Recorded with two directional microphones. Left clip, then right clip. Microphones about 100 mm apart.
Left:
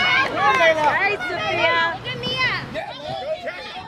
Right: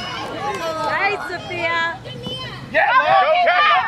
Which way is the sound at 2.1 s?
15° left (ahead or behind).